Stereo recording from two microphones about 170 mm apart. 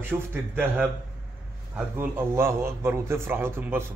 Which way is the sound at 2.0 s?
15° right (ahead or behind).